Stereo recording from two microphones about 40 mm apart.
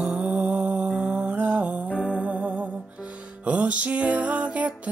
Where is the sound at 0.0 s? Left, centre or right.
Right.